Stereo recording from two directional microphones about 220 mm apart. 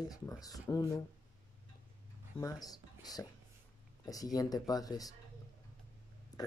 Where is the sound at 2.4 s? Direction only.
15° left (ahead or behind).